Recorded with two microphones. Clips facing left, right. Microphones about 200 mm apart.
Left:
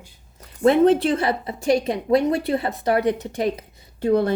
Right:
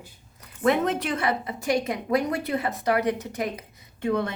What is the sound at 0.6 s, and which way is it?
A woman's voice, 30° left (ahead or behind).